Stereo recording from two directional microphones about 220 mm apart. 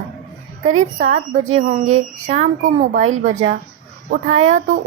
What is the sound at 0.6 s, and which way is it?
A woman's voice, 35° right (ahead or behind).